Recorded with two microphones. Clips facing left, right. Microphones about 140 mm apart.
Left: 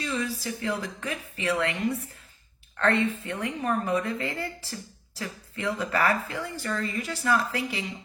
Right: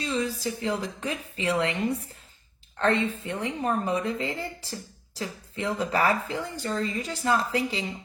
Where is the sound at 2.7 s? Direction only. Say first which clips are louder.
Even; 20° right (ahead or behind).